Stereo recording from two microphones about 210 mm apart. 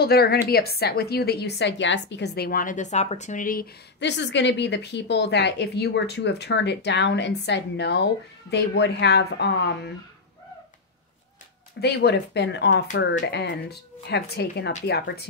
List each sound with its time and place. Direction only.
0.0 s a woman's voice: 50° left (ahead or behind)
4.0 s a woman's voice: 55° left (ahead or behind)
11.8 s a woman's voice: 50° left (ahead or behind)